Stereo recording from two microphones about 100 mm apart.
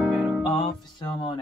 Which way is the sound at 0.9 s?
50° left (ahead or behind).